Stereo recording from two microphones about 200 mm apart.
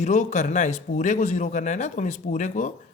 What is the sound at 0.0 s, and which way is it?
A man's voice, 35° left (ahead or behind).